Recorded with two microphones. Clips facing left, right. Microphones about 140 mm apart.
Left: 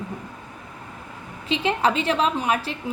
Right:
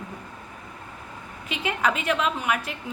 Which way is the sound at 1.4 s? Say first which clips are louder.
Left 4 dB; 30° left (ahead or behind).